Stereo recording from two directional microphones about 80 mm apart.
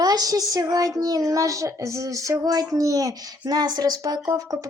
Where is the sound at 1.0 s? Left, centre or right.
Right.